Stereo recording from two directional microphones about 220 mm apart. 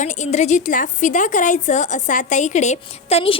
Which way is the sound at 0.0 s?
35° left (ahead or behind).